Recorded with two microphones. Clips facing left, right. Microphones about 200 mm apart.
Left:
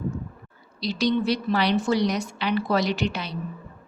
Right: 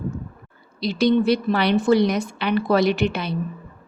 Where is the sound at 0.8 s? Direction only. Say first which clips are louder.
Right 5 dB; 55° right (ahead or behind).